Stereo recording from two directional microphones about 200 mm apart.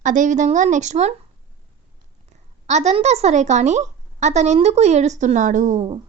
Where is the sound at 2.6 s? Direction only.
35° right (ahead or behind).